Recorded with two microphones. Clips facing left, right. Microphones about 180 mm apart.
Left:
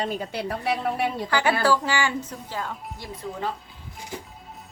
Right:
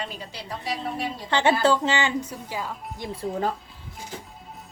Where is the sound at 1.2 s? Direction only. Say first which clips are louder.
Right 3 dB; 25° right (ahead or behind).